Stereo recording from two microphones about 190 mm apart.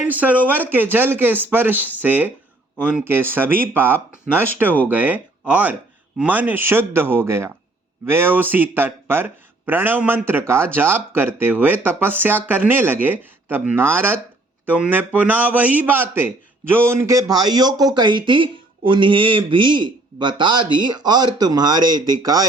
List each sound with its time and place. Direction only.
0.0 s speech: 10° right (ahead or behind)